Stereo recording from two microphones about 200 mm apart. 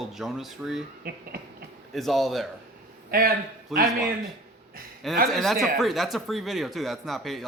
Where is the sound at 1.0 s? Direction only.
45° right (ahead or behind).